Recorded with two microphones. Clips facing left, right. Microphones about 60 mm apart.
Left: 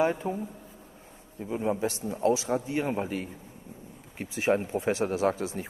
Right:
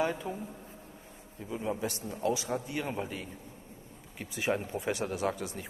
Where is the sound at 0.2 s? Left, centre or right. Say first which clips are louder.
Left 6 dB; left.